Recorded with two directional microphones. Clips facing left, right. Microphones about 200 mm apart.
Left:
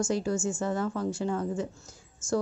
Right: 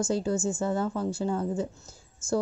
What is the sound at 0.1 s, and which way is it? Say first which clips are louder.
Speech: right 1 dB; 25° right (ahead or behind).